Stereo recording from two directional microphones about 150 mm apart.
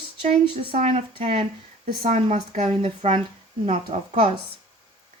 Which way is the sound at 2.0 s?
50° right (ahead or behind).